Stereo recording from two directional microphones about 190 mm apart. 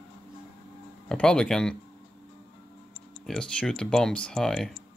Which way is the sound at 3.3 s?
5° left (ahead or behind).